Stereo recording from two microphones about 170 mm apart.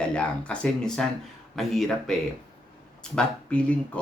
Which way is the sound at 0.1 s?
5° left (ahead or behind).